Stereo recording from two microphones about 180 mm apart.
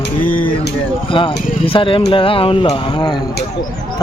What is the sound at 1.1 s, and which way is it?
Speech, 30° left (ahead or behind).